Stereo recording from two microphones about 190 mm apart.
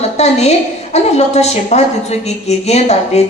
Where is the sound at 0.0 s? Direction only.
35° left (ahead or behind).